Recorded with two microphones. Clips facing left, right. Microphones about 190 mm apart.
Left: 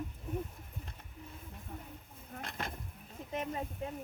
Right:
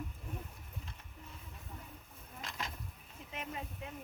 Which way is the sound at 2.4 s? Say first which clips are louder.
Left 2 dB; 55° left (ahead or behind).